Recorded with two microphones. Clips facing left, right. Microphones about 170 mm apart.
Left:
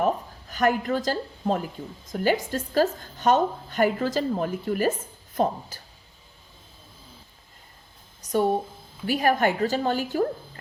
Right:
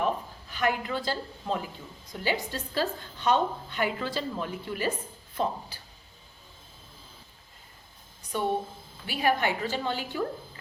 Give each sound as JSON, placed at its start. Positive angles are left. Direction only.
{"t": 0.0, "sound": "a woman's voice", "side_deg": 45}
{"t": 8.2, "sound": "a woman's voice", "side_deg": 40}